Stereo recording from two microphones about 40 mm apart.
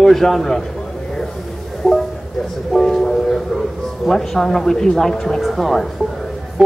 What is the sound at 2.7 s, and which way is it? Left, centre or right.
Speech, centre.